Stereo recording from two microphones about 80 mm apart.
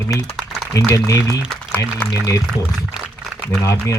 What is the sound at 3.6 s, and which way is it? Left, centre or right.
Speech, left.